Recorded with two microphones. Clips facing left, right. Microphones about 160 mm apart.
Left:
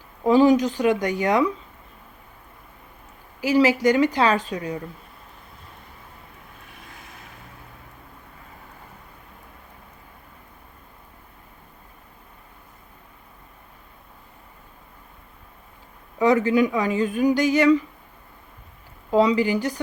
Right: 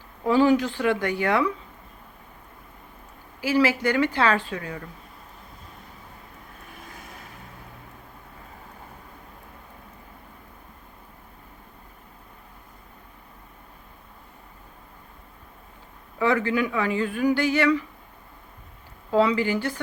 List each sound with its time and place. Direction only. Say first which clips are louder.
0.3 s speech: left 3 dB; 15° left (ahead or behind)
3.4 s speech: left 4 dB; 15° left (ahead or behind)
16.1 s speech: left 5 dB; 15° left (ahead or behind)
19.1 s speech: left 2 dB; 15° left (ahead or behind)